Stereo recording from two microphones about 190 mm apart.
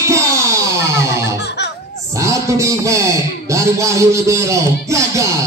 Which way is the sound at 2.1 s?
15° right (ahead or behind).